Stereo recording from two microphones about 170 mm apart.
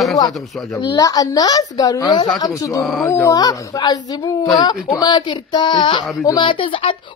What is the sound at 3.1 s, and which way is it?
A woman's voice, 15° left (ahead or behind).